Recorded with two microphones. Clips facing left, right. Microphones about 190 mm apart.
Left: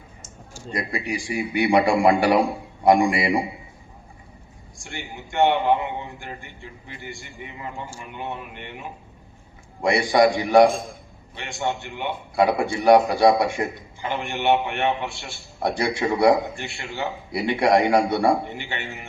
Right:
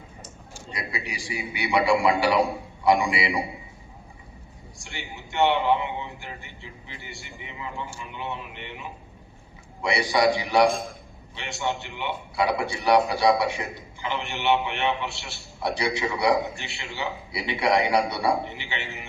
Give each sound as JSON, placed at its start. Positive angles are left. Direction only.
{"t": 0.7, "sound": "a man's voice", "side_deg": 50}
{"t": 4.8, "sound": "a man's voice", "side_deg": 50}